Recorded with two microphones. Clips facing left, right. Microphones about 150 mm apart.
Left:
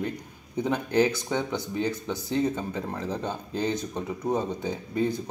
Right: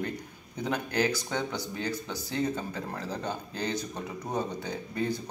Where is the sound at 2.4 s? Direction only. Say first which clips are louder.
Left 4 dB; 5° left (ahead or behind).